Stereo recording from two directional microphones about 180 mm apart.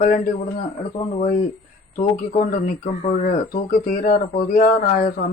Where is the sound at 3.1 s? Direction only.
50° left (ahead or behind).